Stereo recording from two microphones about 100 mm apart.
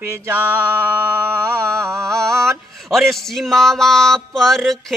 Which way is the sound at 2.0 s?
5° left (ahead or behind).